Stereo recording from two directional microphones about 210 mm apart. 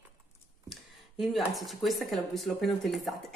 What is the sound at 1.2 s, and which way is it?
A woman's voice, centre (ahead or behind).